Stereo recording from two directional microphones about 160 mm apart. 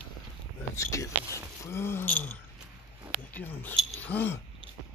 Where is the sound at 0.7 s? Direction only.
20° left (ahead or behind).